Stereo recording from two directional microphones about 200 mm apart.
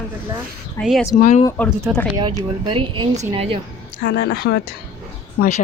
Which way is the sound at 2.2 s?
25° right (ahead or behind).